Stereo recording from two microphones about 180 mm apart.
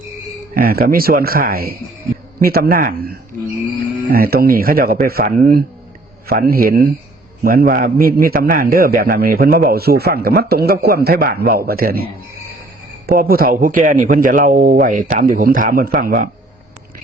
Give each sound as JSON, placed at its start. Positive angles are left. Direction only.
{"t": 0.5, "sound": "a man's voice", "side_deg": -55}
{"t": 13.1, "sound": "a man's voice", "side_deg": -55}